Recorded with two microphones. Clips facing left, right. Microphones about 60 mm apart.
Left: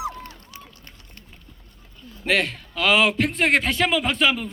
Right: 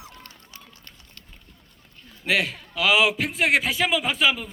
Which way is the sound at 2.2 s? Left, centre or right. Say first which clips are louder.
Left 2 dB; centre.